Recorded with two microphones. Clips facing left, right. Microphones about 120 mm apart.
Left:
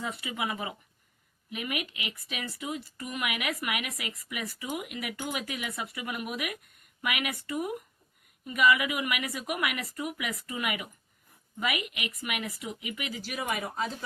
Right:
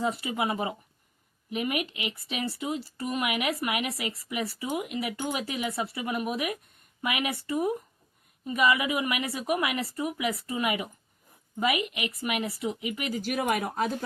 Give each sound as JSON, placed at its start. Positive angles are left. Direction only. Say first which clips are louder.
{"t": 0.0, "sound": "a woman's voice", "louder": "right 6 dB", "side_deg": -35}